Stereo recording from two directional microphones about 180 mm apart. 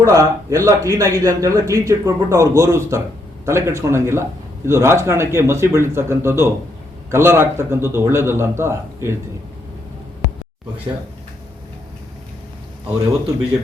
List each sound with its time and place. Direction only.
0.0 s a man's voice: 15° right (ahead or behind)